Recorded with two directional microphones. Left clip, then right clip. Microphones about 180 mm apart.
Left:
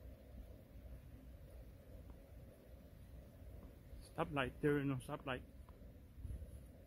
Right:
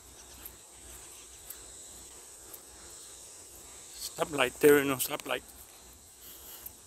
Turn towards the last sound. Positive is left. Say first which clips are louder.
# right 12 dB
turn(degrees=-20)  # may be behind; listen again after turning